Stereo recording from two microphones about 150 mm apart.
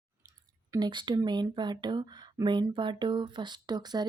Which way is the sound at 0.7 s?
30° right (ahead or behind).